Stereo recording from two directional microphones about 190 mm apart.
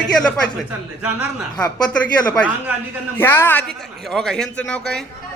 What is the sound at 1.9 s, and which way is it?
A man's voice, 5° left (ahead or behind).